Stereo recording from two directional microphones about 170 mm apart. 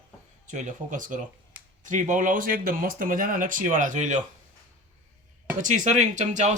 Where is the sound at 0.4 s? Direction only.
45° right (ahead or behind).